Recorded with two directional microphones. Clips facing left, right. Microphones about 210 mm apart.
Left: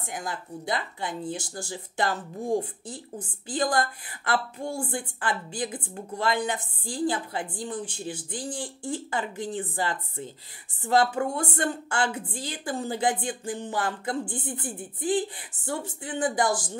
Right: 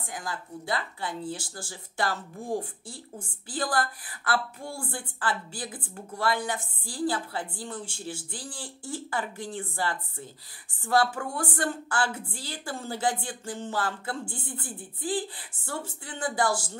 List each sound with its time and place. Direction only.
0.1 s speech: 20° left (ahead or behind)
7.8 s speech: 10° right (ahead or behind)
8.3 s speech: 20° left (ahead or behind)